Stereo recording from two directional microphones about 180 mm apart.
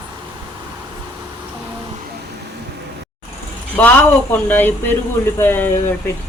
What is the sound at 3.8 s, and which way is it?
Speech, 10° left (ahead or behind).